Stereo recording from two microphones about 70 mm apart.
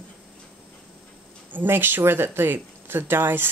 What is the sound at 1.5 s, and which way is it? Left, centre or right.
Speech, right.